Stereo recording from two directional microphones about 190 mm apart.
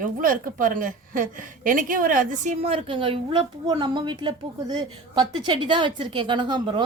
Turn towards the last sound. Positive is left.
turn(degrees=-25)  # may be behind; listen again after turning